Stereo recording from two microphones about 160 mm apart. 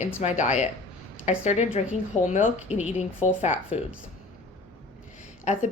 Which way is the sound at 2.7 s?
10° right (ahead or behind).